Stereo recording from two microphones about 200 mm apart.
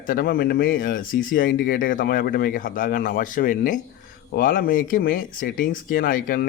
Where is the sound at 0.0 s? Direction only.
45° left (ahead or behind).